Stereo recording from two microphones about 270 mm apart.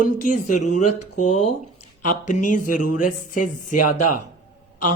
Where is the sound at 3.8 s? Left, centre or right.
Left.